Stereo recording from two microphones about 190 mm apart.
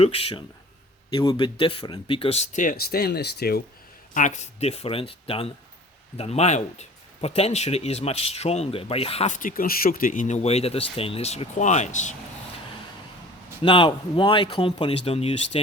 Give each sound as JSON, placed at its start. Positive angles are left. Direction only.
{"t": 0.0, "sound": "speech", "side_deg": 30}
{"t": 4.1, "sound": "speech", "side_deg": 40}
{"t": 13.6, "sound": "speech", "side_deg": 25}